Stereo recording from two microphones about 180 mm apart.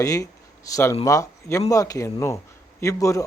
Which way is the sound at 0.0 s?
20° left (ahead or behind).